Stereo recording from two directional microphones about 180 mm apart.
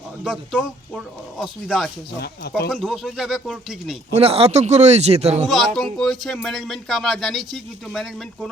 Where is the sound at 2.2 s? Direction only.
65° left (ahead or behind).